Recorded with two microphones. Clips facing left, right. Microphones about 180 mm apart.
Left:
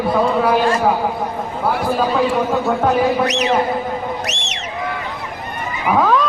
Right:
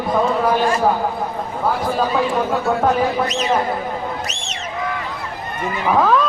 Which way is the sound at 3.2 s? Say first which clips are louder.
Left 3 dB; 70° left (ahead or behind).